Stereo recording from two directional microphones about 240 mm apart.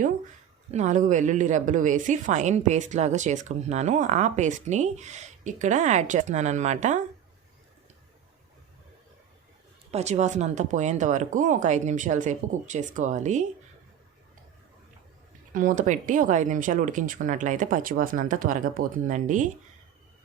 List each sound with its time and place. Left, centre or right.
0.7 s speech: right
9.9 s speech: right
15.5 s speech: right